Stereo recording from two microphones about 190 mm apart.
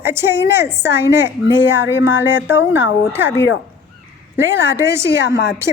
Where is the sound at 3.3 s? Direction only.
75° left (ahead or behind).